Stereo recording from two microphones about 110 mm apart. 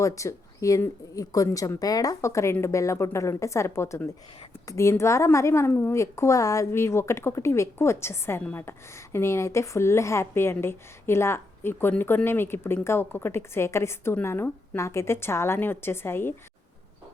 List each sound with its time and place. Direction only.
0.0 s a woman's voice: 30° left (ahead or behind)